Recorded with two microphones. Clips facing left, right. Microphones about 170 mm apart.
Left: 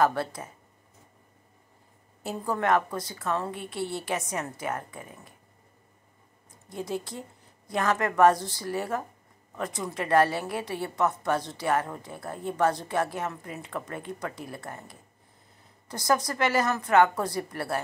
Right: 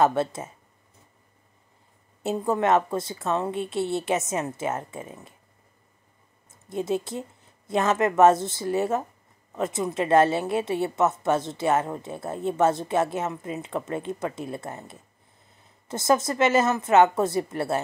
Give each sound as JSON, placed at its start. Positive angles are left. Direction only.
{"t": 0.0, "sound": "a woman's voice", "side_deg": -25}
{"t": 2.2, "sound": "a woman's voice", "side_deg": -20}
{"t": 6.5, "sound": "a woman's voice", "side_deg": -25}